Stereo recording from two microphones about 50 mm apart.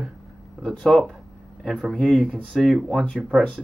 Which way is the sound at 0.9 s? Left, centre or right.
Centre.